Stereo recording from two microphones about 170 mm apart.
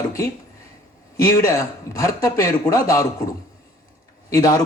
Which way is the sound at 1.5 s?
20° left (ahead or behind).